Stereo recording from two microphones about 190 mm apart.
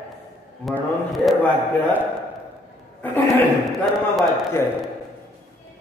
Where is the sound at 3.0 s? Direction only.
10° left (ahead or behind).